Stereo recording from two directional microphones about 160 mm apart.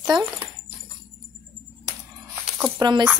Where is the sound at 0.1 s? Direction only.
25° right (ahead or behind).